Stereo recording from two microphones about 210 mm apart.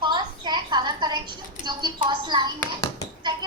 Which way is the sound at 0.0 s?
20° right (ahead or behind).